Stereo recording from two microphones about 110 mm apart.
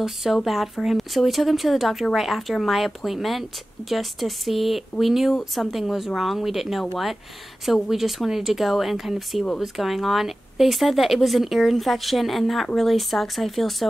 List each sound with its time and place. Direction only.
0.0 s speech: centre (ahead or behind)